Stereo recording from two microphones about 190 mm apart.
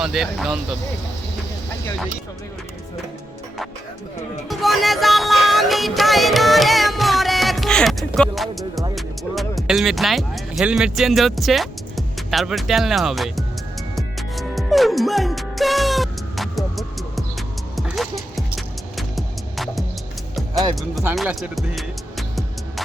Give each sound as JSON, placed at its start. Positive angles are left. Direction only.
{"t": 0.0, "sound": "music", "side_deg": 0}
{"t": 4.4, "sound": "music", "side_deg": 0}
{"t": 9.0, "sound": "speech", "side_deg": 0}
{"t": 13.9, "sound": "music", "side_deg": 0}
{"t": 20.5, "sound": "music", "side_deg": -20}
{"t": 21.2, "sound": "music", "side_deg": -5}